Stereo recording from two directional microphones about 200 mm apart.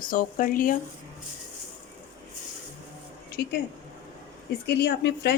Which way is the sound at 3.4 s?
55° left (ahead or behind).